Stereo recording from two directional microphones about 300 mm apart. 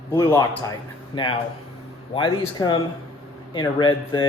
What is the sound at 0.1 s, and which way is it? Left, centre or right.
Speech, centre.